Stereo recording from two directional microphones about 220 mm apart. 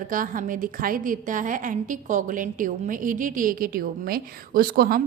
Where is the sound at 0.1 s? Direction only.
40° right (ahead or behind).